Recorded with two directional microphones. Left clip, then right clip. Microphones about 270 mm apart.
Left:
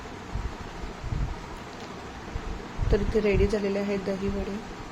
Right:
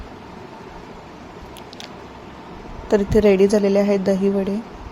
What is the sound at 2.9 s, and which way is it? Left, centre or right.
Speech, right.